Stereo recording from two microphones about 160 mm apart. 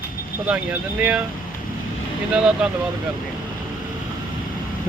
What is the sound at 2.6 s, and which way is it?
Speech, 5° right (ahead or behind).